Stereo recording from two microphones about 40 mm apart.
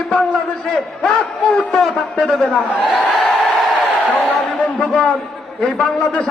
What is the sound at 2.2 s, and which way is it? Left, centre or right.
Speech, centre.